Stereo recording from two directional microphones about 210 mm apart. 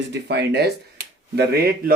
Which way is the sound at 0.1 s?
55° right (ahead or behind).